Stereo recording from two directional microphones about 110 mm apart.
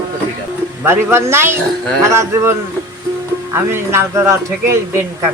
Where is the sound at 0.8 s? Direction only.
20° right (ahead or behind).